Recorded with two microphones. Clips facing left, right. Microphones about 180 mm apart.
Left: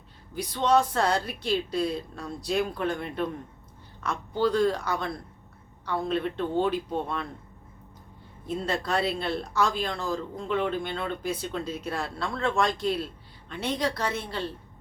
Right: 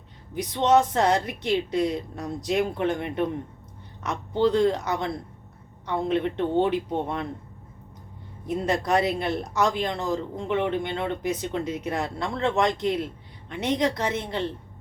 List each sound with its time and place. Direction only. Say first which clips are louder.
0.3 s speech: right 3 dB; 20° right (ahead or behind)
8.4 s speech: right 4 dB; 15° right (ahead or behind)